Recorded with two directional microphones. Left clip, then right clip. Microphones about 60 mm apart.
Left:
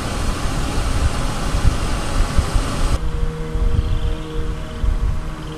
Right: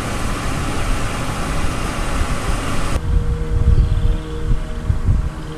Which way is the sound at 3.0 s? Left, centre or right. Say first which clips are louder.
Right 1 dB; left.